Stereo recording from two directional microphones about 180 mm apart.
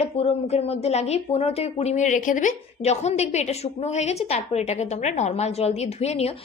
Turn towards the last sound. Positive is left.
turn(degrees=35)  # may be behind; listen again after turning